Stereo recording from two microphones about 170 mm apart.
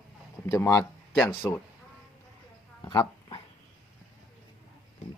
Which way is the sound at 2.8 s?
20° left (ahead or behind).